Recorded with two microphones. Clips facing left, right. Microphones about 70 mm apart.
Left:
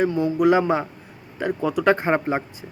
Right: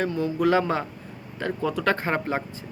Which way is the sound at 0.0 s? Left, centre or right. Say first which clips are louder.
Left 4 dB; centre.